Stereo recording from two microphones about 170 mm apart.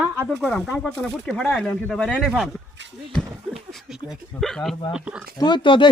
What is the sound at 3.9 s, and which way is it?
Speech, centre (ahead or behind).